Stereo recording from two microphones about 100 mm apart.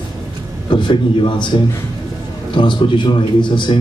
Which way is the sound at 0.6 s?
50° left (ahead or behind).